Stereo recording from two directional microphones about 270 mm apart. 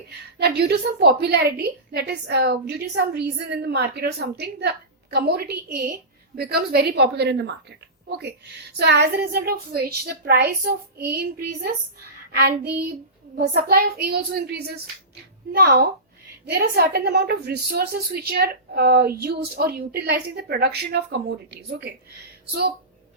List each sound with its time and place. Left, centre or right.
0.3 s a woman's voice: right
8.8 s a woman's voice: right